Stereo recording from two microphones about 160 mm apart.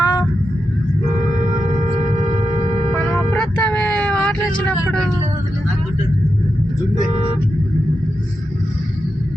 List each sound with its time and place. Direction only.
0.0 s honk: 20° left (ahead or behind)
3.0 s vehicle: 10° left (ahead or behind)
4.9 s a sound: 5° left (ahead or behind)